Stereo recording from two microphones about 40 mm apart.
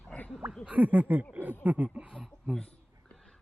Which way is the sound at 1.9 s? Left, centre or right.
Right.